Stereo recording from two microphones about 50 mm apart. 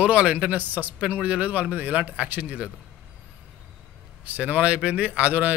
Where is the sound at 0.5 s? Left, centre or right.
Right.